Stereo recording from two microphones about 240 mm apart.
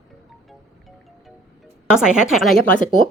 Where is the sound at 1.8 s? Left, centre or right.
Centre.